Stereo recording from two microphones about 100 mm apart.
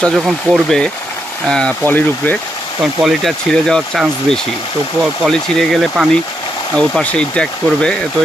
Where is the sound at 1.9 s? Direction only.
15° left (ahead or behind).